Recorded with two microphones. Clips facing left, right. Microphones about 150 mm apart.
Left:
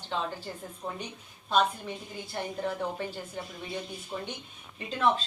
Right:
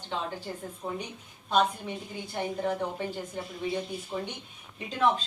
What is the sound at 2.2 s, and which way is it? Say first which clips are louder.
Speech: right 3 dB; 15° right (ahead or behind).